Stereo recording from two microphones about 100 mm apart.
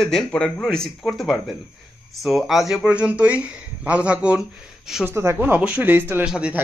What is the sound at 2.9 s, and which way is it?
Speech, 15° right (ahead or behind).